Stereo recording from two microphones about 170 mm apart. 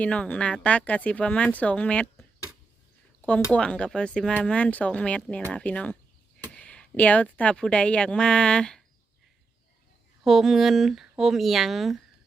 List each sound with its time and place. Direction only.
0.0 s speech: 5° left (ahead or behind)
10.2 s speech: centre (ahead or behind)